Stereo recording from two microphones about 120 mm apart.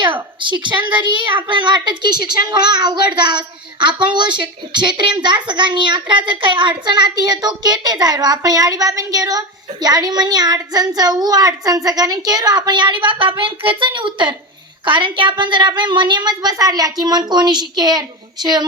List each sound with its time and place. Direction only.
0.0 s a woman's voice: 40° right (ahead or behind)